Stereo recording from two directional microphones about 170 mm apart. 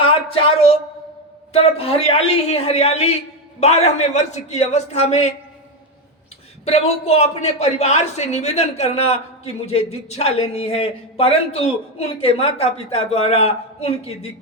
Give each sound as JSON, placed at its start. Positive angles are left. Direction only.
{"t": 0.0, "sound": "a sound", "side_deg": 30}
{"t": 1.5, "sound": "a man's voice", "side_deg": 35}
{"t": 6.7, "sound": "a man's voice", "side_deg": 40}